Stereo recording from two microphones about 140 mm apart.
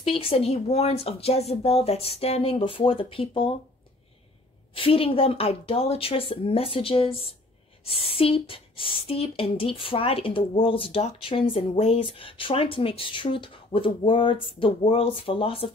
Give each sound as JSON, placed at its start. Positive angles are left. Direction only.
{"t": 0.0, "sound": "speech", "side_deg": 40}
{"t": 4.7, "sound": "speech", "side_deg": 40}